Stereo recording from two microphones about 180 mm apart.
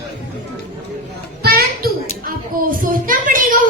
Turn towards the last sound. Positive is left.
turn(degrees=-50)  # may be behind; listen again after turning